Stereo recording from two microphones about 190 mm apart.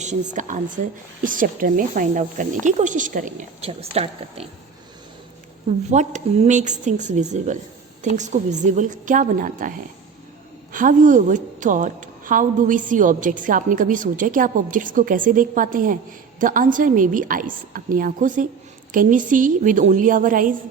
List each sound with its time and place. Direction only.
0.0 s a woman's voice: 40° right (ahead or behind)
5.9 s a woman's voice: 40° right (ahead or behind)